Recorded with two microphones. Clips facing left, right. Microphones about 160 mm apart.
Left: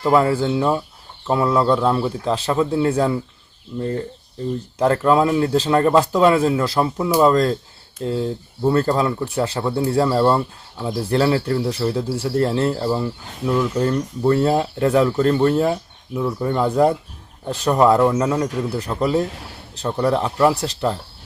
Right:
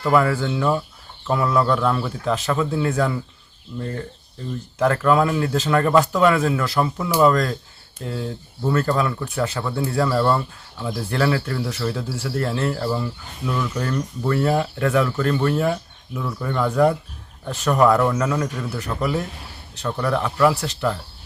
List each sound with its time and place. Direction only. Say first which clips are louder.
0.0 s speech: left 2 dB; 25° left (ahead or behind)